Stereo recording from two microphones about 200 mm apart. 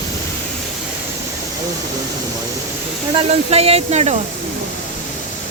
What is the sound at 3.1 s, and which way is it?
Speech, 30° right (ahead or behind).